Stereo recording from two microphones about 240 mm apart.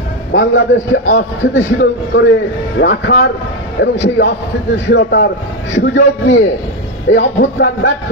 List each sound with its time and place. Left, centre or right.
0.3 s a man's voice: left